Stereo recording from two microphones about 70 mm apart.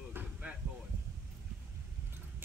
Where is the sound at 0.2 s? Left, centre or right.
Centre.